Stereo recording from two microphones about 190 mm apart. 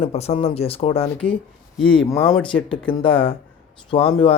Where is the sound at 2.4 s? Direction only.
25° left (ahead or behind).